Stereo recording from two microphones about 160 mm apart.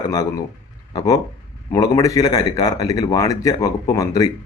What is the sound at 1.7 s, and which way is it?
Speech, 20° left (ahead or behind).